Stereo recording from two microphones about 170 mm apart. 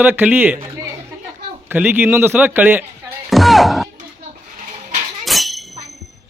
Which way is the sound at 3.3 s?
Centre (ahead or behind).